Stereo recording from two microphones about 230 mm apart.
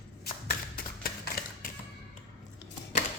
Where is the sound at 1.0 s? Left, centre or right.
Left.